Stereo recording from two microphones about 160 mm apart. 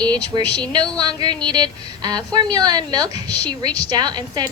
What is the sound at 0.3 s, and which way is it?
A woman's voice, 25° right (ahead or behind).